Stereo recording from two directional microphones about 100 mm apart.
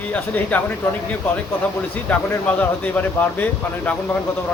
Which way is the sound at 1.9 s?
15° left (ahead or behind).